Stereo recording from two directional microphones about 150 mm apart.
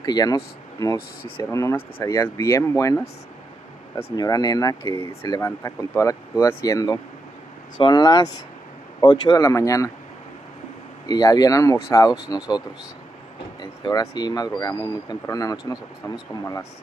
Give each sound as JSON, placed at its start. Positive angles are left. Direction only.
{"t": 0.0, "sound": "speech", "side_deg": 25}
{"t": 4.2, "sound": "speech", "side_deg": 25}
{"t": 4.8, "sound": "speech", "side_deg": -35}
{"t": 5.3, "sound": "speech", "side_deg": 20}
{"t": 11.1, "sound": "speech", "side_deg": 25}